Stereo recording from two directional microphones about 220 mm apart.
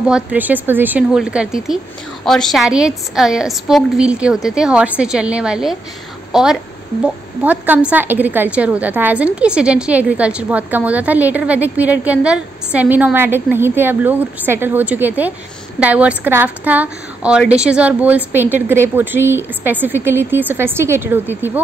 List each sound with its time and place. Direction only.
0.1 s a woman's voice: 5° right (ahead or behind)